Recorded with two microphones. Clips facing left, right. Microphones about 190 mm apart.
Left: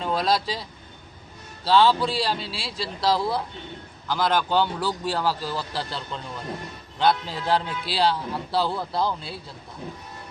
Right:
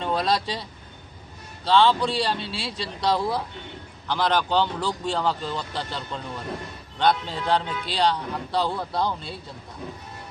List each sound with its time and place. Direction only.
0.0 s speech: centre (ahead or behind)
1.6 s a man's voice: 5° left (ahead or behind)
7.0 s a man's voice: 5° left (ahead or behind)